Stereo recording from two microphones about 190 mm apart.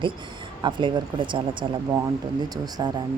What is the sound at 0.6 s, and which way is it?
Speech, 25° right (ahead or behind).